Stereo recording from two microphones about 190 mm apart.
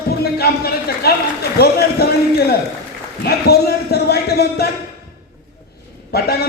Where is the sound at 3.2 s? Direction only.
55° left (ahead or behind).